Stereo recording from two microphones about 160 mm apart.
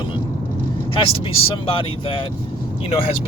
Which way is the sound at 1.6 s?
35° left (ahead or behind).